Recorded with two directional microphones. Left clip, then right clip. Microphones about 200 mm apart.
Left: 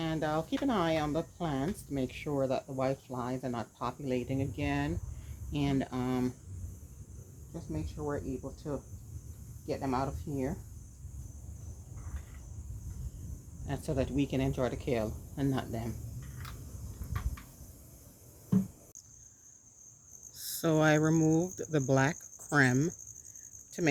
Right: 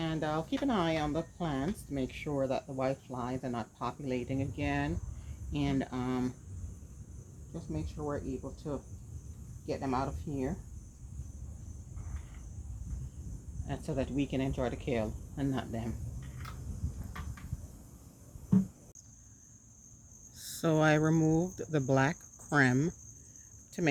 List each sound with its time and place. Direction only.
0.0 s speech: 25° left (ahead or behind)
7.5 s speech: 20° left (ahead or behind)
13.7 s speech: 30° left (ahead or behind)
20.3 s speech: 5° left (ahead or behind)